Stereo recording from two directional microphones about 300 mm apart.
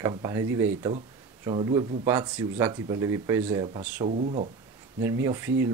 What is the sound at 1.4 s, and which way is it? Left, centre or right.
Speech, centre.